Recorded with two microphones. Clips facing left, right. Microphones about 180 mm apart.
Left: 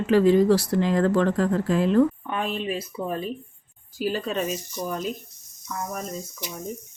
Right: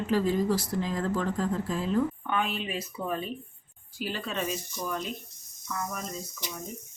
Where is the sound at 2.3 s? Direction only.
35° left (ahead or behind).